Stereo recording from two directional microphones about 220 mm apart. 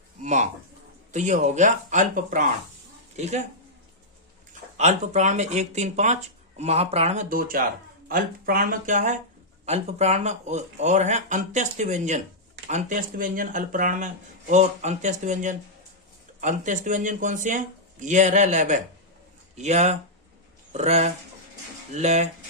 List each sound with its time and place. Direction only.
0.2 s a sound: 35° right (ahead or behind)
1.1 s speech: 35° right (ahead or behind)
4.8 s speech: 30° right (ahead or behind)